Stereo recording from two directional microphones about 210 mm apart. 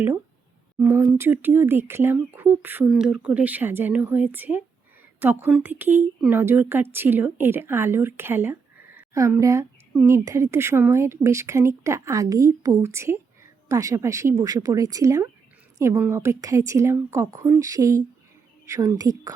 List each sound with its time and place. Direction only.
0.8 s speech: 15° right (ahead or behind)